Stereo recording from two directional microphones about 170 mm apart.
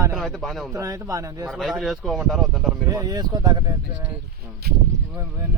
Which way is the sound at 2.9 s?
20° right (ahead or behind).